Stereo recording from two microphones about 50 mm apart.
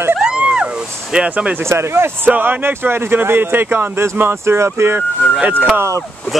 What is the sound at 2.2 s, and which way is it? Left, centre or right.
Speech, right.